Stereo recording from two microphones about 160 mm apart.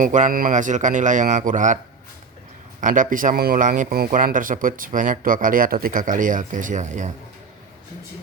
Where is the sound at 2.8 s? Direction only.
55° right (ahead or behind).